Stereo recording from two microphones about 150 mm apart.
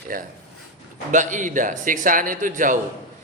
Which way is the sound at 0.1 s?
65° right (ahead or behind).